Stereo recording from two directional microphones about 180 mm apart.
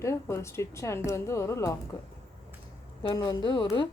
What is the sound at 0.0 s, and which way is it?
A woman's voice, 15° left (ahead or behind).